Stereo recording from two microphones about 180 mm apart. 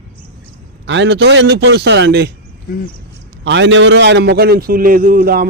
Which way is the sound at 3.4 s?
90° right.